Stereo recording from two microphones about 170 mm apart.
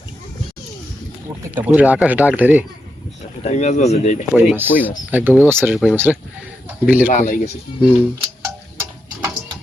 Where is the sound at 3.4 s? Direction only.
40° left (ahead or behind).